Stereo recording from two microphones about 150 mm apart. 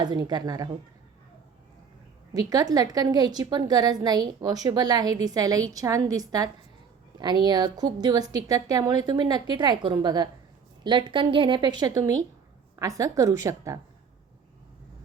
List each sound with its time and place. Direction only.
0.0 s a woman's voice: 30° right (ahead or behind)
2.3 s a woman's voice: 25° right (ahead or behind)